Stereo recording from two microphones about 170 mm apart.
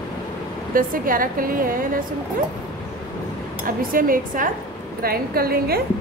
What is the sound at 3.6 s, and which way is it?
A woman's voice, 55° right (ahead or behind).